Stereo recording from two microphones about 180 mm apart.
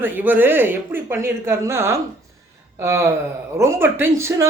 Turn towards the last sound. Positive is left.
turn(degrees=-15)  # may be behind; listen again after turning